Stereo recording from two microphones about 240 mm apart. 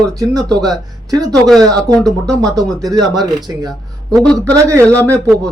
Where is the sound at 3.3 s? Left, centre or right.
Centre.